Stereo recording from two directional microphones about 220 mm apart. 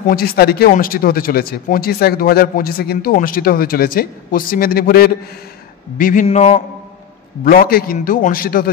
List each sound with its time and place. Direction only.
0.1 s a man's voice: 45° left (ahead or behind); by 6.6 s 30° left (ahead or behind)
7.4 s speech: 40° left (ahead or behind)